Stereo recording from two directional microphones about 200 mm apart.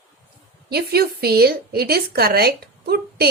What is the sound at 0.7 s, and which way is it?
A woman's voice, 50° right (ahead or behind).